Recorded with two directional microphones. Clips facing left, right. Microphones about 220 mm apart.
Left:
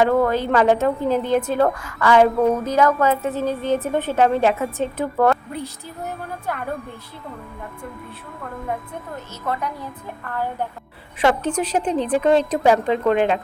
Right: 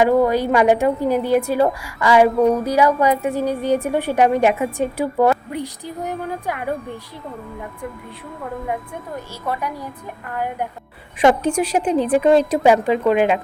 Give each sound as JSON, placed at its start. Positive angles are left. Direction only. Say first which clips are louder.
{"t": 0.0, "sound": "a woman's voice", "louder": "right 2 dB", "side_deg": -15}
{"t": 9.5, "sound": "a woman's voice", "louder": "right 1 dB", "side_deg": -10}